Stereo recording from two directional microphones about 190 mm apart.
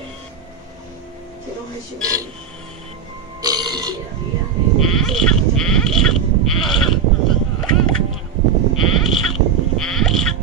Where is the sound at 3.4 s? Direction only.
20° right (ahead or behind).